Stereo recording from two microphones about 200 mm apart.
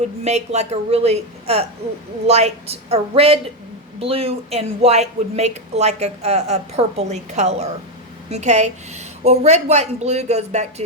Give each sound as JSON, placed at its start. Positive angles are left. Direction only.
{"t": 0.3, "sound": "speech", "side_deg": -35}